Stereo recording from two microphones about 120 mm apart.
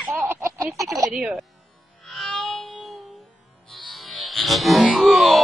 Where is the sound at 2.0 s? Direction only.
Centre (ahead or behind).